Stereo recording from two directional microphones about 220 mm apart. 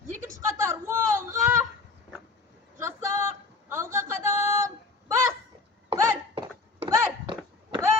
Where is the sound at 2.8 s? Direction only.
15° right (ahead or behind).